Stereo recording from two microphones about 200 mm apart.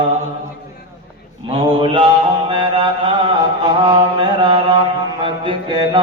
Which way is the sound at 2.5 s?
25° right (ahead or behind).